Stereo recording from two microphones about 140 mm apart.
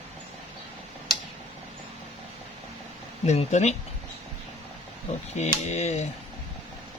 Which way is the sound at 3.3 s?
55° left (ahead or behind).